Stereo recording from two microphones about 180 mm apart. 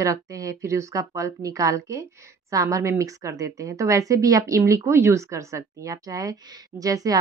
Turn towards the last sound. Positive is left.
turn(degrees=-20)  # may be behind; listen again after turning